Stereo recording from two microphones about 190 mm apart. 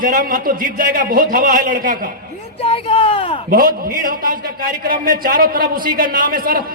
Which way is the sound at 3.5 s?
50° right (ahead or behind).